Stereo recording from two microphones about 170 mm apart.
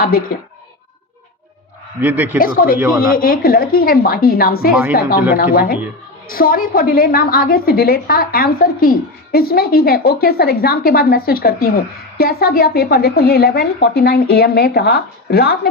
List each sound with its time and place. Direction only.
0.0 s a woman's voice: 60° left (ahead or behind)
2.0 s a man's voice: 10° right (ahead or behind)
2.4 s a woman's voice: 60° left (ahead or behind)